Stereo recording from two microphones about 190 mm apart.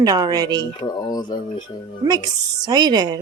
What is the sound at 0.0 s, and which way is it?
Speech, 20° right (ahead or behind).